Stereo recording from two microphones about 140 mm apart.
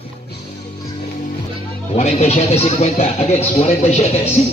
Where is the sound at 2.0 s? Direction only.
50° left (ahead or behind).